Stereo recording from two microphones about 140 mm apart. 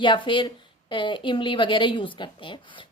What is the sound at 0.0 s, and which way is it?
Speech, 35° left (ahead or behind).